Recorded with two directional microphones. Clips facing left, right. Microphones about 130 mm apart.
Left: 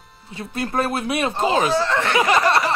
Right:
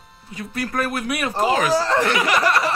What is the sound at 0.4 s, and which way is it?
Speech, 25° left (ahead or behind).